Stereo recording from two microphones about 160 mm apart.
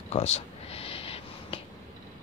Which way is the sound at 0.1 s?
40° left (ahead or behind).